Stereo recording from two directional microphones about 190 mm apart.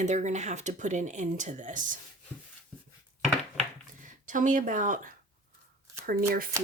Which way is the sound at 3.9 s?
45° right (ahead or behind).